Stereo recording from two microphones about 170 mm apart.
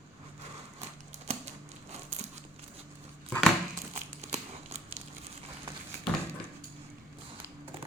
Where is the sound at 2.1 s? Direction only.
40° right (ahead or behind).